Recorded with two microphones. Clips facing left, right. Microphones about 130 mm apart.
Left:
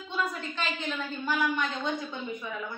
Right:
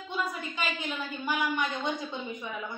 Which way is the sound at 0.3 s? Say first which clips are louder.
Even; 10° right (ahead or behind).